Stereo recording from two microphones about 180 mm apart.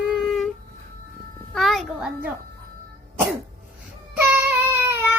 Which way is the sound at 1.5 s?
Centre (ahead or behind).